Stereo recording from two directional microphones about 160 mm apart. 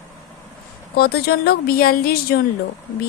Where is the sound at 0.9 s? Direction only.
75° left (ahead or behind).